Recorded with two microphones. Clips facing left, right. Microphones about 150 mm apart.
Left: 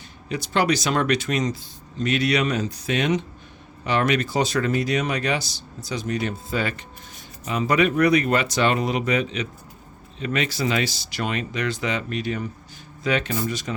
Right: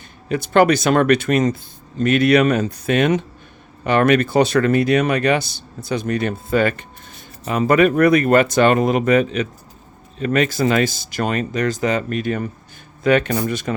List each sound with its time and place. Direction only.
0.3 s speech: 55° right (ahead or behind)